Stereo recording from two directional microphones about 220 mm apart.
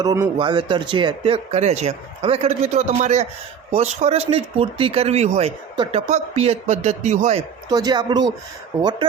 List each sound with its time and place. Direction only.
0.0 s a man's voice: 15° right (ahead or behind)
7.7 s speech: 15° right (ahead or behind)